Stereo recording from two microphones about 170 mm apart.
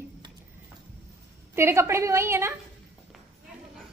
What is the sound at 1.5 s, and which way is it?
A woman's voice, 15° right (ahead or behind).